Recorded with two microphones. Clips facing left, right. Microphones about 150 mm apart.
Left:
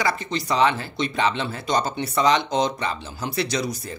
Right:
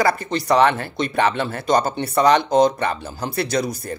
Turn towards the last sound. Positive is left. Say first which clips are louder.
# right 4 dB
turn(degrees=-50)  # may be behind; listen again after turning